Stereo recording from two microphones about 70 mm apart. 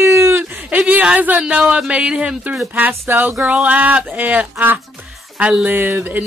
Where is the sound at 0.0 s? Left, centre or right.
Right.